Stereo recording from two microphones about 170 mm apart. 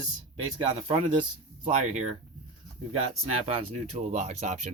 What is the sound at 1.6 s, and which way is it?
Speech, 45° right (ahead or behind).